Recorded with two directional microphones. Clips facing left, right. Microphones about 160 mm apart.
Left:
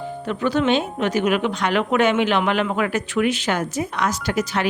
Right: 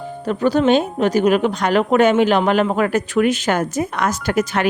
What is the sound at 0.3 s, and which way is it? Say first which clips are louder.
A woman's voice: right 5 dB; 40° right (ahead or behind).